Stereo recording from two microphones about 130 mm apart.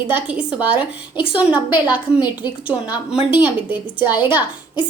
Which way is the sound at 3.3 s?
35° left (ahead or behind).